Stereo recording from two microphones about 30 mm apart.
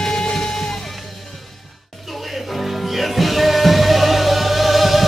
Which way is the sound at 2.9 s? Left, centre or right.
Centre.